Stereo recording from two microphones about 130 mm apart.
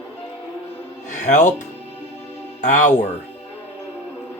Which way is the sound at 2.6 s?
70° left (ahead or behind).